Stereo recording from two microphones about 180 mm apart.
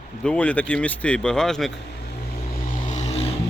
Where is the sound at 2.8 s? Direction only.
40° left (ahead or behind).